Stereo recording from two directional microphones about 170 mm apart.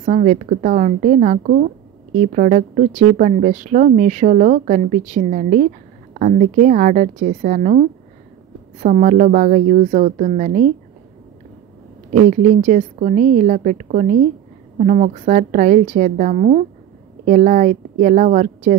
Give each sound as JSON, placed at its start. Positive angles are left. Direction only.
{"t": 0.0, "sound": "a woman's voice", "side_deg": -50}
{"t": 12.1, "sound": "a woman's voice", "side_deg": -45}